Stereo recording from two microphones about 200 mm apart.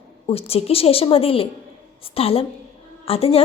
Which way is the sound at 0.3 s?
30° left (ahead or behind).